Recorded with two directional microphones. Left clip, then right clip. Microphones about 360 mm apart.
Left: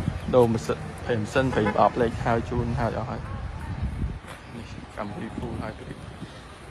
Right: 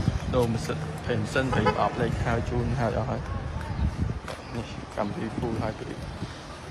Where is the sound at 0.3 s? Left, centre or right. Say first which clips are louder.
Left 7 dB; centre.